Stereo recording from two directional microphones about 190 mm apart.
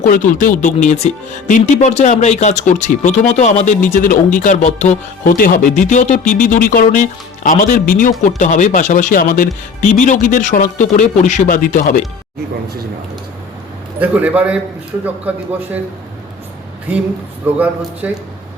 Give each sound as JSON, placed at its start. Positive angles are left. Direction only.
{"t": 0.0, "sound": "speech", "side_deg": 45}
{"t": 14.0, "sound": "a man's voice", "side_deg": -10}
{"t": 17.5, "sound": "a man's voice", "side_deg": -10}